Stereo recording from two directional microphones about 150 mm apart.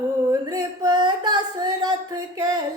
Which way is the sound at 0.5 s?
30° right (ahead or behind).